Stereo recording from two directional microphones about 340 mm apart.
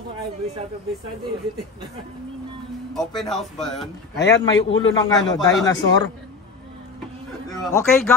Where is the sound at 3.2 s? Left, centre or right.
Centre.